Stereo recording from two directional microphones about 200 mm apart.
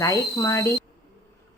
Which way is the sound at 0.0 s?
15° left (ahead or behind).